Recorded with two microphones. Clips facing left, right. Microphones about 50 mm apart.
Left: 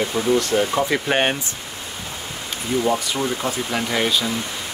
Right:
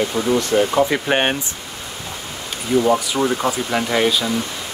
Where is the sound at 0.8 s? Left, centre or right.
Right.